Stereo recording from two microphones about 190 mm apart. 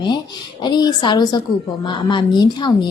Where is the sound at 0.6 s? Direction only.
20° left (ahead or behind).